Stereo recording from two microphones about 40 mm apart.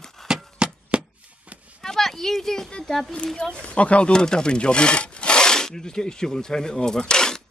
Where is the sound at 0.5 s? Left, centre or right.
Right.